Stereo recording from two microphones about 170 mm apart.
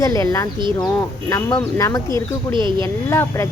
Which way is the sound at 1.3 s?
20° left (ahead or behind).